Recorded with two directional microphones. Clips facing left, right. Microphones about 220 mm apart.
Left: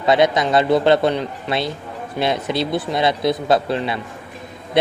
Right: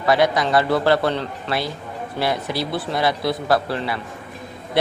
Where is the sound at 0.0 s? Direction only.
20° left (ahead or behind).